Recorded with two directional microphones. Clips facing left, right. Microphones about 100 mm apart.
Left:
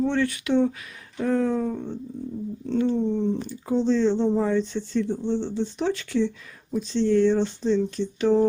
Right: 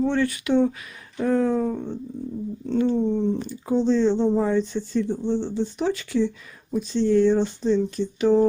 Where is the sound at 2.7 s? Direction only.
15° right (ahead or behind).